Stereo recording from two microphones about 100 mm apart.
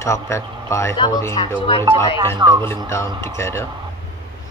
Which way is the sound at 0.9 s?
50° left (ahead or behind).